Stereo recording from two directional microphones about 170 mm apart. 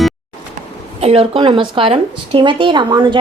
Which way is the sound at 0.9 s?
35° right (ahead or behind).